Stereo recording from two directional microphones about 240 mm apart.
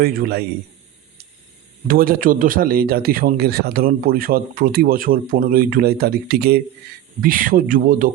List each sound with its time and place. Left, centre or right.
0.0 s speech: right
1.9 s speech: right